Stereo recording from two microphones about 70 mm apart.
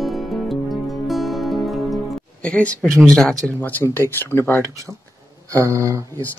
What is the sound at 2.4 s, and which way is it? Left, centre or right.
Speech, centre.